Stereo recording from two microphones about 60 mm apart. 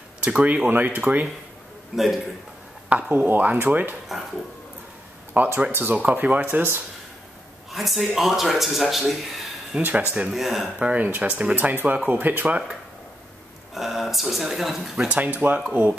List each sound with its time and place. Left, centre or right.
0.2 s speech: right
1.9 s speech: centre
3.1 s speech: right
5.3 s speech: right
5.9 s speech: right
7.7 s speech: centre
9.8 s speech: right
10.3 s speech: centre
10.8 s speech: right
13.7 s speech: centre
15.0 s speech: right